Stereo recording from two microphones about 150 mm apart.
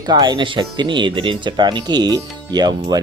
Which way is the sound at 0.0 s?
30° right (ahead or behind).